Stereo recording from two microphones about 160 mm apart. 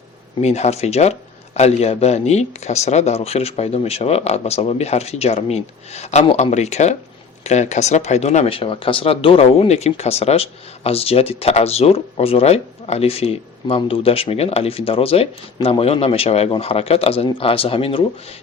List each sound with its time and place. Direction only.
0.4 s speech: 45° left (ahead or behind)